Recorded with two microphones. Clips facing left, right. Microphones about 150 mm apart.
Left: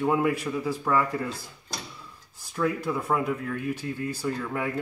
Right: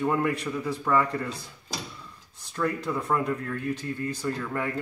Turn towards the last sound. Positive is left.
turn(degrees=5)  # may be behind; listen again after turning